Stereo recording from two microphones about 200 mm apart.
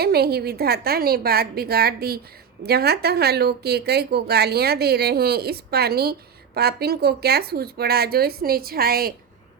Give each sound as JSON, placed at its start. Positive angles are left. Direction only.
{"t": 0.0, "sound": "a woman's voice", "side_deg": -50}